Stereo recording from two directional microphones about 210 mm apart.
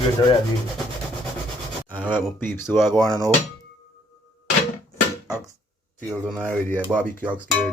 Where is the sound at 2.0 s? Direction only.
5° right (ahead or behind).